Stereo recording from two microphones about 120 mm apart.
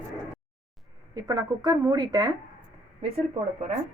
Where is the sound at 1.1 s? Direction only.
30° right (ahead or behind).